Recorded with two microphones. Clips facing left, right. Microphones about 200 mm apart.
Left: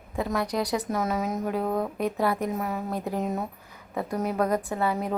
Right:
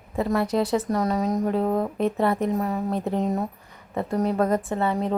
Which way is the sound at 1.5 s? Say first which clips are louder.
Right 2 dB; 25° right (ahead or behind).